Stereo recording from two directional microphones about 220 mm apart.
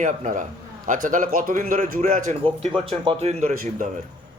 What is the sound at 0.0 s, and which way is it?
Speech, 35° right (ahead or behind).